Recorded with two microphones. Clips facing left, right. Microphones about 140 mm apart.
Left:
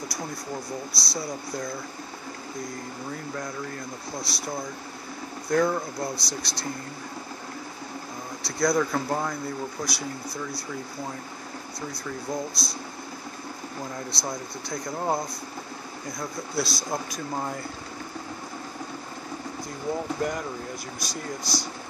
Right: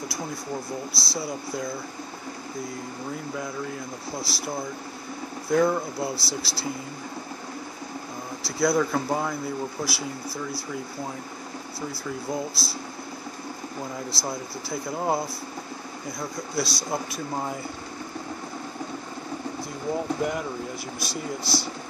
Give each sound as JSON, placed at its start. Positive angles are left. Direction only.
{"t": 0.9, "sound": "speech", "side_deg": 0}
{"t": 3.3, "sound": "speech", "side_deg": -5}
{"t": 8.4, "sound": "speech", "side_deg": 0}
{"t": 12.3, "sound": "speech", "side_deg": -5}
{"t": 13.9, "sound": "speech", "side_deg": -5}
{"t": 20.2, "sound": "speech", "side_deg": -5}